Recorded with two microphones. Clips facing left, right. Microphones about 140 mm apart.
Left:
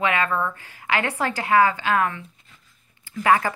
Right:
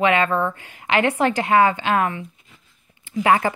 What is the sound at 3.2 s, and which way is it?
Speech, 25° right (ahead or behind).